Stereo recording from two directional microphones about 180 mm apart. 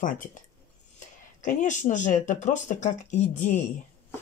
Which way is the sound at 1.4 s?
45° left (ahead or behind).